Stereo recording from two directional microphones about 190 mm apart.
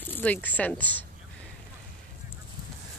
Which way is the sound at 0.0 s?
10° left (ahead or behind).